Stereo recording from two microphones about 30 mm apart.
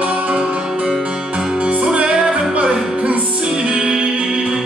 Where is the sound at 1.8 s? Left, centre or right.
Right.